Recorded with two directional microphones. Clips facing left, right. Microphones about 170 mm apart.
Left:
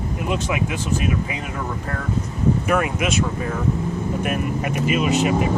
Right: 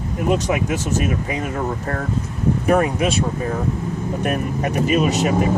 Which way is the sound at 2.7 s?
35° right (ahead or behind).